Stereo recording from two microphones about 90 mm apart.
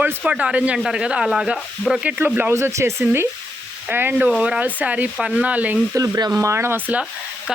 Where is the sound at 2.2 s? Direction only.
20° right (ahead or behind).